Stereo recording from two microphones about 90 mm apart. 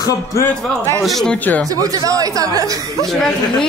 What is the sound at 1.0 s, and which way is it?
Speech, centre (ahead or behind).